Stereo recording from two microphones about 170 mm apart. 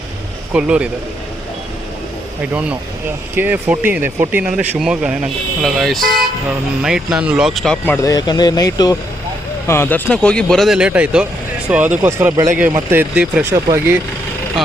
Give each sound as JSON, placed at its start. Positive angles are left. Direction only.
{"t": 0.5, "sound": "speech", "side_deg": -5}
{"t": 2.4, "sound": "speech", "side_deg": -10}
{"t": 8.0, "sound": "speech", "side_deg": 25}